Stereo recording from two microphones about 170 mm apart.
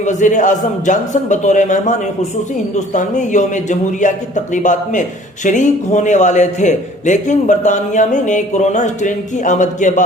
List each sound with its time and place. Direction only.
0.0 s a man's voice: 45° left (ahead or behind)